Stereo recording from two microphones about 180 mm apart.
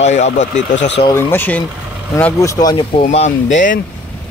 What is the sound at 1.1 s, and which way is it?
Speech, 15° left (ahead or behind).